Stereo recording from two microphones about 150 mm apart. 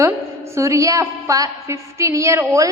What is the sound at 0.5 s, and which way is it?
A woman's voice, 20° right (ahead or behind).